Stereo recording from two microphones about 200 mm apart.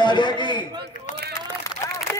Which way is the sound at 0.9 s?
40° left (ahead or behind).